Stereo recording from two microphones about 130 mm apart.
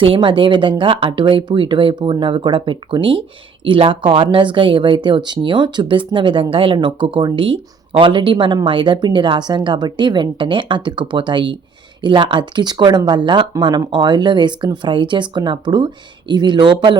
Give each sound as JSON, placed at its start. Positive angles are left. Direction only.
{"t": 0.0, "sound": "speech", "side_deg": -40}